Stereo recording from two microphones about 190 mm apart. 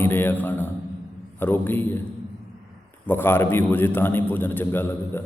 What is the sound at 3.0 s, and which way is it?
A man's voice, 10° left (ahead or behind).